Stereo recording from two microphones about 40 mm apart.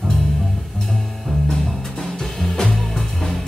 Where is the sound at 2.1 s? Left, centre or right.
Centre.